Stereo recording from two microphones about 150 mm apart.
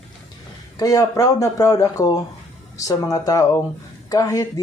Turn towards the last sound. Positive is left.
turn(degrees=20)  # may be behind; listen again after turning